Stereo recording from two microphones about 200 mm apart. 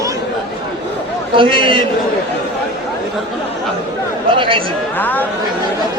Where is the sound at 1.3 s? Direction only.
25° right (ahead or behind).